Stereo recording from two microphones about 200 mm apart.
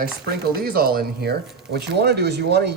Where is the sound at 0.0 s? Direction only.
50° right (ahead or behind).